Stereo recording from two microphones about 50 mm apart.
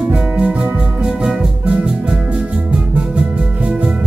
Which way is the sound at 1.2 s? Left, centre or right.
Centre.